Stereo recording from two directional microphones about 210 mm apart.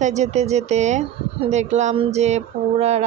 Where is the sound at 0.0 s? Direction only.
35° right (ahead or behind).